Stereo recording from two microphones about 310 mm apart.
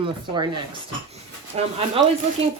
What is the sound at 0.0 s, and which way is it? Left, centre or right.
Speech, centre.